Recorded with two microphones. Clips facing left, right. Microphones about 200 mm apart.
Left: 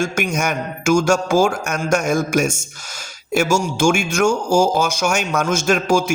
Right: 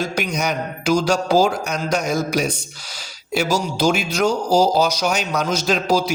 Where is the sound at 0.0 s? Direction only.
50° left (ahead or behind).